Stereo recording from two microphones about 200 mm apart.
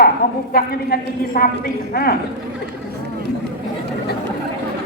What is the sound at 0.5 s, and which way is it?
A man's voice, 50° left (ahead or behind).